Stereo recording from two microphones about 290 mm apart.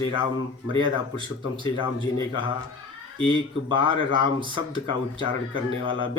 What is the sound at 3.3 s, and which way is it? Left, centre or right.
Speech, centre.